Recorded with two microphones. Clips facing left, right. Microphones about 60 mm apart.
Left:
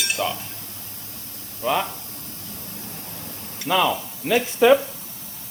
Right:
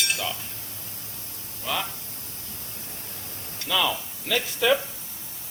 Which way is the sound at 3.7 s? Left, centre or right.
Left.